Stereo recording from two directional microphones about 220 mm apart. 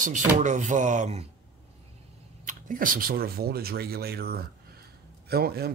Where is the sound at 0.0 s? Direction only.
35° right (ahead or behind).